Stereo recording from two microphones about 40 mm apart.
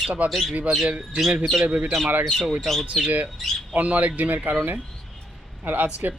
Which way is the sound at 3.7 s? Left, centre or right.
Right.